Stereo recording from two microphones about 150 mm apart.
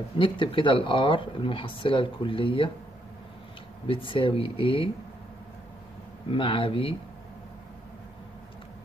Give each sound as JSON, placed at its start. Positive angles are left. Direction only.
{"t": 0.2, "sound": "speech", "side_deg": 35}
{"t": 3.8, "sound": "speech", "side_deg": 35}
{"t": 6.3, "sound": "speech", "side_deg": 35}